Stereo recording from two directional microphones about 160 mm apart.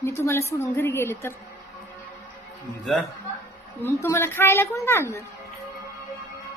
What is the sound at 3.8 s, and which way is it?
A woman's voice, 15° left (ahead or behind).